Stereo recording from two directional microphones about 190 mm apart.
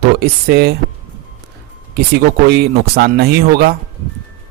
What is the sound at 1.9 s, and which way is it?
Speech, 60° right (ahead or behind).